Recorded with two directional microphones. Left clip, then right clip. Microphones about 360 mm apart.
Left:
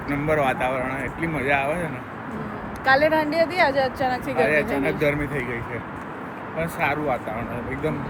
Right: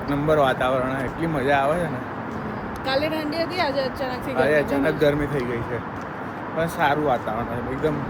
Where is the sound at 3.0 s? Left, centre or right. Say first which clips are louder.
Left 5 dB; left.